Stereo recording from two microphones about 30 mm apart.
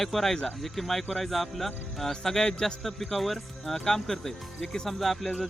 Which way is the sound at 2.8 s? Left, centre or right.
Centre.